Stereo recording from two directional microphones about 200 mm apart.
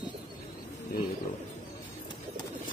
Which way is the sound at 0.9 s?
45° left (ahead or behind).